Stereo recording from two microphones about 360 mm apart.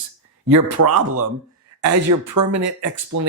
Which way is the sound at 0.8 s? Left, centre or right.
Right.